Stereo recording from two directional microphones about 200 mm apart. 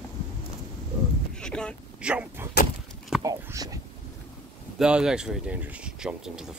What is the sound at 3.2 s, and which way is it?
Speech, 15° right (ahead or behind).